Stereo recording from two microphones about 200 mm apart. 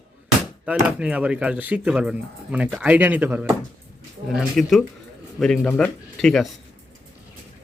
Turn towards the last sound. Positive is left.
turn(degrees=5)  # may be behind; listen again after turning